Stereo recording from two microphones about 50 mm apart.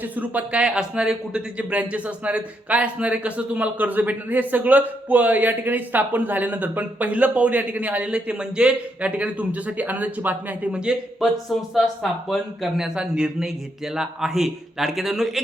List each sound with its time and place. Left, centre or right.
0.2 s a man's voice: right
11.2 s a man's voice: centre